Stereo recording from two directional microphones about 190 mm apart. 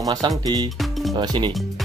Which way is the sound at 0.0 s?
20° right (ahead or behind).